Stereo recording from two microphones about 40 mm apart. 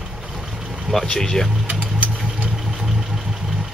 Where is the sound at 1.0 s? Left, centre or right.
Centre.